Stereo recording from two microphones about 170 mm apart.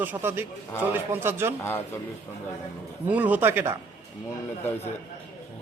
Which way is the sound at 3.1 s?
10° right (ahead or behind).